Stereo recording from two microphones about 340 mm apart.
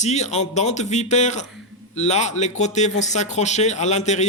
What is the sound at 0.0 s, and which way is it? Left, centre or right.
Speech, centre.